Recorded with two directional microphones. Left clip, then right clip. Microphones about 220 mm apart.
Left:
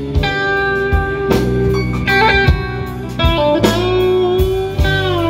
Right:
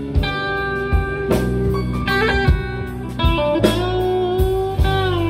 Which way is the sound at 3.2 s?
20° left (ahead or behind).